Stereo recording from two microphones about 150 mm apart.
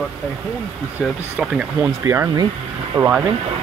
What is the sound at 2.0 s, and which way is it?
Speech, 20° right (ahead or behind).